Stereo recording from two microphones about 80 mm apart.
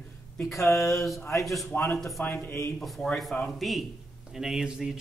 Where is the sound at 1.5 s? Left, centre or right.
Centre.